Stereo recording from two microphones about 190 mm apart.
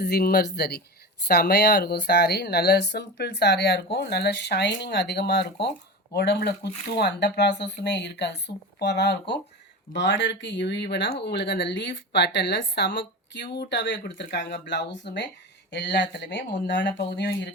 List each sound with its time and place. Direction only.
0.0 s speech: 55° left (ahead or behind)